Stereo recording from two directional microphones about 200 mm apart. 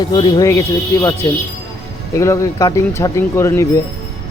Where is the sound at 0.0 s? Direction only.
20° left (ahead or behind).